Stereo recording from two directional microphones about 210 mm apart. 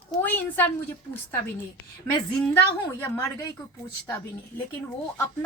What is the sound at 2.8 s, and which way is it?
Speech, 15° left (ahead or behind).